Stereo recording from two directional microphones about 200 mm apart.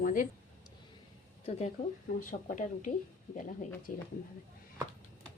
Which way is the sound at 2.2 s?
45° left (ahead or behind).